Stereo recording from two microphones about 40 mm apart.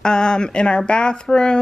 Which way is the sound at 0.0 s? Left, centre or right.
Centre.